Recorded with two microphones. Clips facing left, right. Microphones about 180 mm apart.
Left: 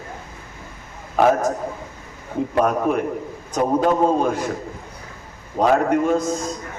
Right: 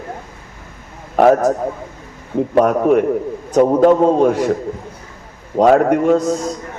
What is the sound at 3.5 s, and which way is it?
A man's voice, 65° right (ahead or behind).